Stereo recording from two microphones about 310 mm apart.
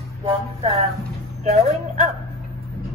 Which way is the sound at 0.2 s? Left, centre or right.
Centre.